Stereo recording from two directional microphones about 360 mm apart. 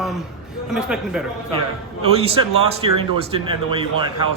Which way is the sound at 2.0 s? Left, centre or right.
Centre.